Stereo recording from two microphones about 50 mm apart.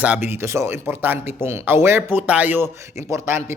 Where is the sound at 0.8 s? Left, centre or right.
Right.